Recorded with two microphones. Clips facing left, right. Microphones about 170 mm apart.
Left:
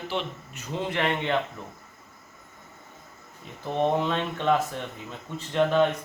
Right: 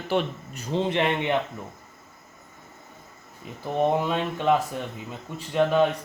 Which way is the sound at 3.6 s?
10° right (ahead or behind).